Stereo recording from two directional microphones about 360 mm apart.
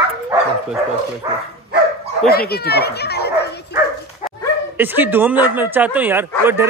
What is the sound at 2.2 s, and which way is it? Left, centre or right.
Speech, left.